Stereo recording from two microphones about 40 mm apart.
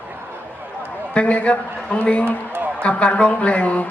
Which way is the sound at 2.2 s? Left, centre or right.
Right.